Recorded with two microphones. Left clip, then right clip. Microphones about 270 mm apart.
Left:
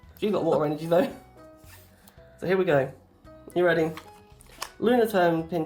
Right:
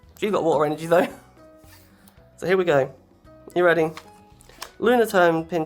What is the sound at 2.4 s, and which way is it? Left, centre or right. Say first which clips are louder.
Speech: right 4 dB; right.